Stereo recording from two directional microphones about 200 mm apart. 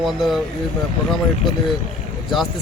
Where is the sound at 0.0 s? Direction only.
Centre (ahead or behind).